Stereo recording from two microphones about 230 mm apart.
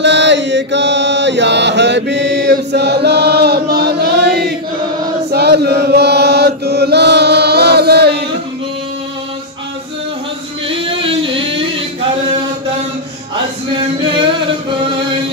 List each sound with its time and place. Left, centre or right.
0.0 s chant: right
10.7 s music: right